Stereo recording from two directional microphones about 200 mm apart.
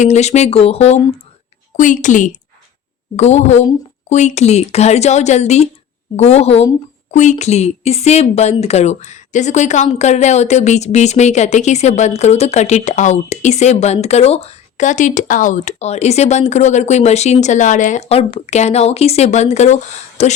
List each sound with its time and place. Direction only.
0.0 s speech: 35° left (ahead or behind)